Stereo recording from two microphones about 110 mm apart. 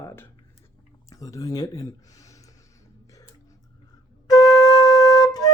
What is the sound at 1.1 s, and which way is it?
Speech, 30° left (ahead or behind).